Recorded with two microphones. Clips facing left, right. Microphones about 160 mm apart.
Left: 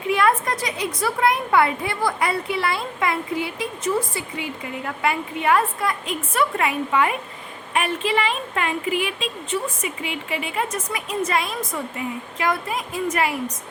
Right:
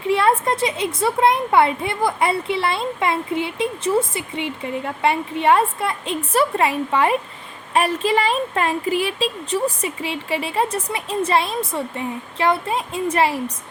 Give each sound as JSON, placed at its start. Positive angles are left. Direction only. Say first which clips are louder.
{"t": 0.1, "sound": "a woman's voice", "louder": "right 2 dB", "side_deg": -30}